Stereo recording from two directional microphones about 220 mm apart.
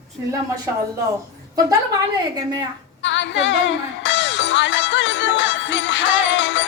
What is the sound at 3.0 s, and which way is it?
Music, 55° left (ahead or behind).